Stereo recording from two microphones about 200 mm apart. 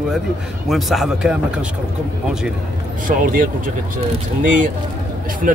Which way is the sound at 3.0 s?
40° right (ahead or behind).